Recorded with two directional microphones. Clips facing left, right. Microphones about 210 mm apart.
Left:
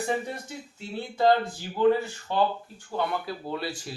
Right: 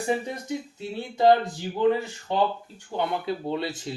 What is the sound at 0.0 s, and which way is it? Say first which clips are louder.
Speech: right 2 dB; 15° right (ahead or behind).